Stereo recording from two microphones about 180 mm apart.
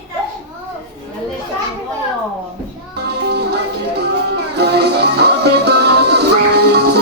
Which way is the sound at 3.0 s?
65° right (ahead or behind).